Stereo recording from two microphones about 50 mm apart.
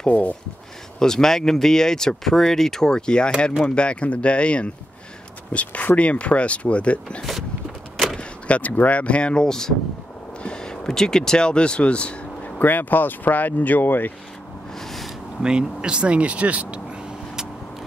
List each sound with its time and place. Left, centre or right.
0.1 s speech: left
0.9 s speech: centre
8.2 s speech: left
12.5 s speech: left
14.8 s a sound: centre
15.4 s speech: centre